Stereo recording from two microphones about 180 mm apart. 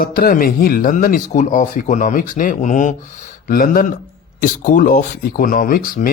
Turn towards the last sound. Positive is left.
turn(degrees=50)  # may be behind; listen again after turning